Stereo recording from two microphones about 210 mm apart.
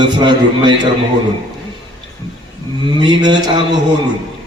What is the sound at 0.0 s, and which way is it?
Speech, 20° right (ahead or behind).